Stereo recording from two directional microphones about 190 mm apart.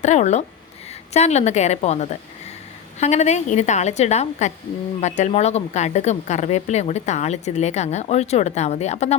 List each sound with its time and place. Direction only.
0.0 s speech: 35° left (ahead or behind)